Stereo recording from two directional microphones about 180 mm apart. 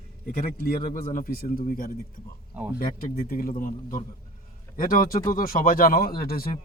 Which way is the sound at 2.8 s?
55° left (ahead or behind).